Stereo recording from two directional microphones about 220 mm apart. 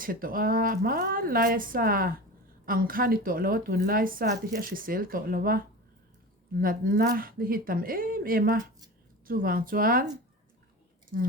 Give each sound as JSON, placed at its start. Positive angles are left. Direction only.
{"t": 0.0, "sound": "a woman's voice", "side_deg": -40}
{"t": 11.1, "sound": "a woman's voice", "side_deg": -40}